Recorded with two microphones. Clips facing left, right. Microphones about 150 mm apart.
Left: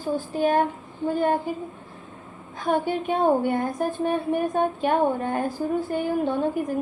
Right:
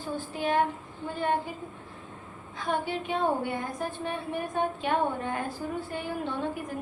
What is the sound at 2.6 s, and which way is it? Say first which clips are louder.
A woman's voice: left 7 dB; 50° left (ahead or behind).